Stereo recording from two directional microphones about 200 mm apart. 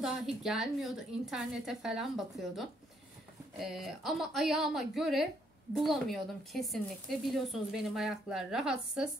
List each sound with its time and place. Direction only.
0.0 s a woman's voice: centre (ahead or behind)